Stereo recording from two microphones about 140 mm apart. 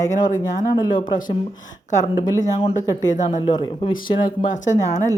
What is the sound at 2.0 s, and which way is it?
Speech, 30° left (ahead or behind).